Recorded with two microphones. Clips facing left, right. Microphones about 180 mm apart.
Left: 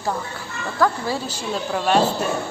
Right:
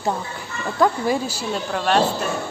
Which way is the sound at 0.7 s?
20° right (ahead or behind).